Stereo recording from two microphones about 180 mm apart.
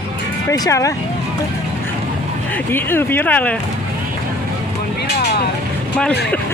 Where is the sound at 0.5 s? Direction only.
20° left (ahead or behind).